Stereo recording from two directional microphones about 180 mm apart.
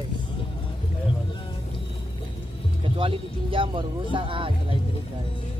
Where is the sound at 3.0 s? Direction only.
30° right (ahead or behind).